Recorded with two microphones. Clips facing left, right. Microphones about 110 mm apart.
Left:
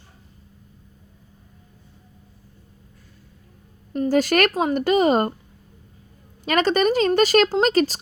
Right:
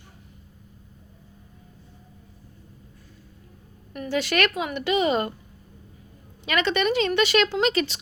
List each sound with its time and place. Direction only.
3.9 s a woman's voice: 35° left (ahead or behind)
6.4 s a woman's voice: 40° left (ahead or behind)